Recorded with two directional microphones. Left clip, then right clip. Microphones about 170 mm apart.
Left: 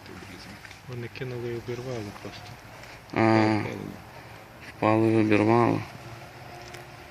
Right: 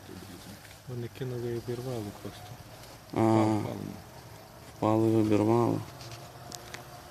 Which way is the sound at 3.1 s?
10° right (ahead or behind).